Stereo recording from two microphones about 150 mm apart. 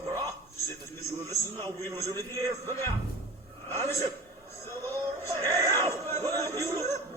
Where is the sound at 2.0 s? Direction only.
20° left (ahead or behind).